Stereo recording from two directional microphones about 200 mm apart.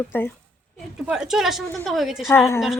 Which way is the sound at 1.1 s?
5° right (ahead or behind).